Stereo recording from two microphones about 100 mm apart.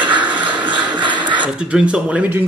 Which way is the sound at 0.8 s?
50° right (ahead or behind).